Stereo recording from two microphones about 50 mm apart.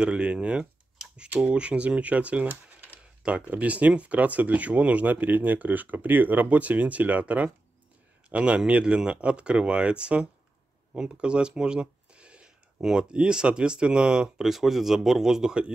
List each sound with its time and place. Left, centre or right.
0.0 s speech: right
14.5 s speech: centre